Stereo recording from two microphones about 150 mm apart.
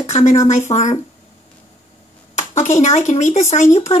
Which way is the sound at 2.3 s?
50° left (ahead or behind).